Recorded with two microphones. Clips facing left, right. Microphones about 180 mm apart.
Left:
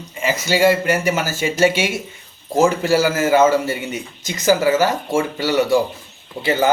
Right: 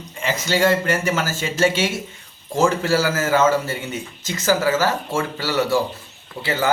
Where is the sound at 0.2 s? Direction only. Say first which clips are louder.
Left 3 dB; 10° left (ahead or behind).